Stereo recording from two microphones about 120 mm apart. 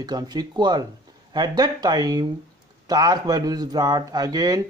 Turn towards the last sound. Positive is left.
turn(degrees=-35)  # may be behind; listen again after turning